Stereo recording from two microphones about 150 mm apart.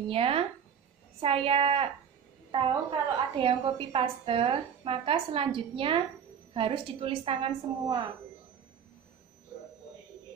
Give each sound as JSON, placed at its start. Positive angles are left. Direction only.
{"t": 0.1, "sound": "a woman's voice", "side_deg": -40}